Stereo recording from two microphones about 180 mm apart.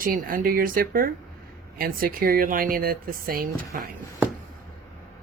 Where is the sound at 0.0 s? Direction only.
55° right (ahead or behind).